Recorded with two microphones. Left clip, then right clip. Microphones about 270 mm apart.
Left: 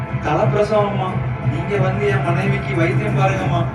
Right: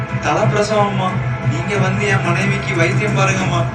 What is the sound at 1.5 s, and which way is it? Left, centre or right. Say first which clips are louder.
A man's voice: right 1 dB; centre.